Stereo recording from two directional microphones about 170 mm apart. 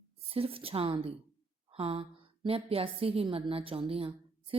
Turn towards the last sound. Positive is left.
turn(degrees=-35)  # may be behind; listen again after turning